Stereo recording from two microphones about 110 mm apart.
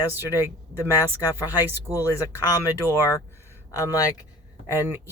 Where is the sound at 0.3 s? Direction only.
20° right (ahead or behind).